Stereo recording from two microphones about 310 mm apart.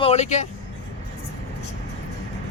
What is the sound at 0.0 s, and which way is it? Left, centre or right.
Speech, left.